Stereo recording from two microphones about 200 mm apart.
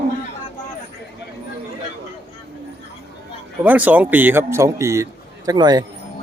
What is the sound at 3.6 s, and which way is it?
A man's voice, 10° right (ahead or behind).